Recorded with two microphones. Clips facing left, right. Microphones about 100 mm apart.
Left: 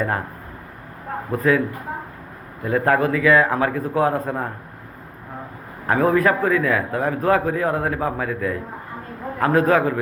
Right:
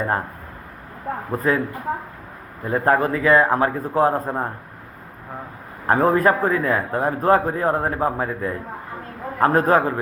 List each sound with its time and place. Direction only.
1.3 s a man's voice: 30° right (ahead or behind)
2.6 s a man's voice: 30° right (ahead or behind)
5.9 s a man's voice: 35° right (ahead or behind)